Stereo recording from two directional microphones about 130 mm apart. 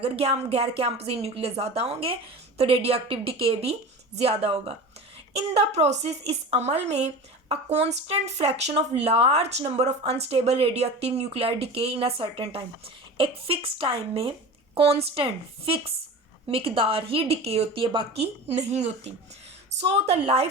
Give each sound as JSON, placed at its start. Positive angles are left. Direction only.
{"t": 0.0, "sound": "a woman's voice", "side_deg": -50}